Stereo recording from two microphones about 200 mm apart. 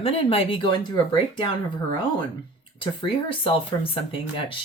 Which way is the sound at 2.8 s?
25° left (ahead or behind).